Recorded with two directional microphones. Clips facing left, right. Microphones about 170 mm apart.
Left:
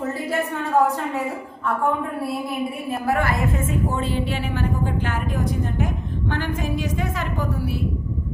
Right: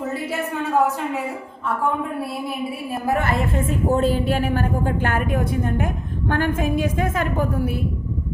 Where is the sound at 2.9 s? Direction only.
20° right (ahead or behind).